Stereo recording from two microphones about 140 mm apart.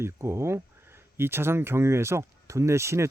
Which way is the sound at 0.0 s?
20° right (ahead or behind).